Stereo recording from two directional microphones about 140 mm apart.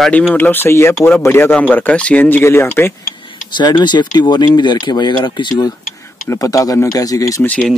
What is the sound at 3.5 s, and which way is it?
Speech, 30° left (ahead or behind).